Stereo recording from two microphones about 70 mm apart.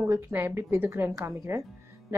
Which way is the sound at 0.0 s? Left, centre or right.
Right.